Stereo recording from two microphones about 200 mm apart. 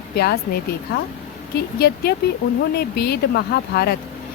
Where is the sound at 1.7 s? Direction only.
50° left (ahead or behind).